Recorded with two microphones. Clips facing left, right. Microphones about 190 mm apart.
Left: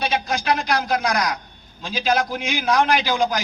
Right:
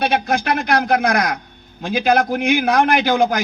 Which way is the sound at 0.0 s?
60° right (ahead or behind).